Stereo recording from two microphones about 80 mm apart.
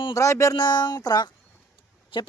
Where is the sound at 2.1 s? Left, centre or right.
Left.